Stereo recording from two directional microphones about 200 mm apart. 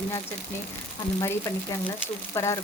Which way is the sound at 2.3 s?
15° left (ahead or behind).